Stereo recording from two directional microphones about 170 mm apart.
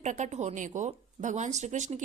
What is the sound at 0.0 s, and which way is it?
Speech, 45° right (ahead or behind).